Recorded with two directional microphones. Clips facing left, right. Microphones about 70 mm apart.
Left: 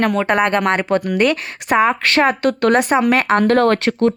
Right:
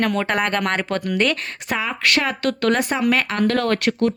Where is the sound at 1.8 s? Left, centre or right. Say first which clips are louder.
Left 7 dB; left.